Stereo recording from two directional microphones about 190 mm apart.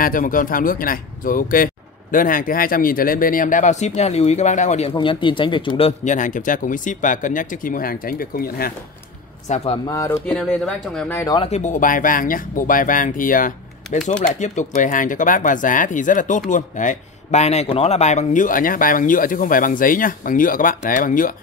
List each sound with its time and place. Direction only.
0.0 s speech: 45° left (ahead or behind)
9.5 s speech: 40° left (ahead or behind)
9.8 s speech: 15° left (ahead or behind)
10.3 s speech: centre (ahead or behind)
11.1 s speech: 20° left (ahead or behind)
11.4 s speech: 35° left (ahead or behind)